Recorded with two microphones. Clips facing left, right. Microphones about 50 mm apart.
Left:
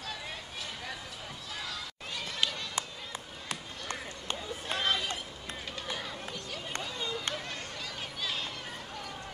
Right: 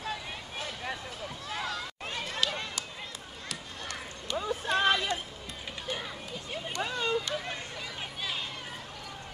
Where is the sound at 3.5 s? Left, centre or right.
Left.